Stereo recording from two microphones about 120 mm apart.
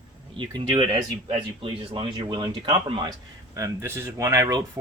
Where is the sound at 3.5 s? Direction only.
25° right (ahead or behind).